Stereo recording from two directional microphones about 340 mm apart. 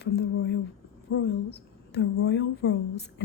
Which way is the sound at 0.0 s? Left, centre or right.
Left.